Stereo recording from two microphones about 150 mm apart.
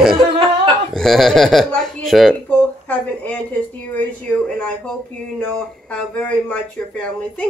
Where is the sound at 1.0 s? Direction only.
Centre (ahead or behind).